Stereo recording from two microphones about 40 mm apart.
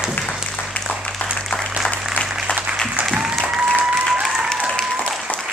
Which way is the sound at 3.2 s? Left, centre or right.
Centre.